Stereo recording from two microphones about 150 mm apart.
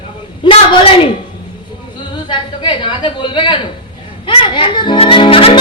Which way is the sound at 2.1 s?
30° left (ahead or behind).